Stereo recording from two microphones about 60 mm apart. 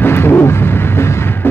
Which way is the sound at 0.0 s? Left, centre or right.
Left.